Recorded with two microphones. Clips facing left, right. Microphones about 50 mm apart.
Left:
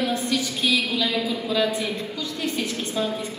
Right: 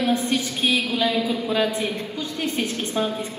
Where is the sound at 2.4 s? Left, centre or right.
Right.